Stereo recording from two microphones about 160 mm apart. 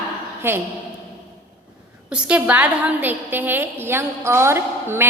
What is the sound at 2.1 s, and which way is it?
A woman's voice, 10° right (ahead or behind).